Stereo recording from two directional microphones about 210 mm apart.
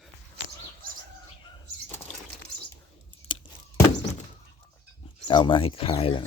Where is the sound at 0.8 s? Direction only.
45° right (ahead or behind).